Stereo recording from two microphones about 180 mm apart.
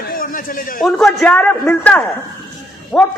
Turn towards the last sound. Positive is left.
turn(degrees=15)  # may be behind; listen again after turning